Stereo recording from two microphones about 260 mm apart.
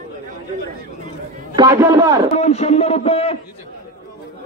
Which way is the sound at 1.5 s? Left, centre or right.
Centre.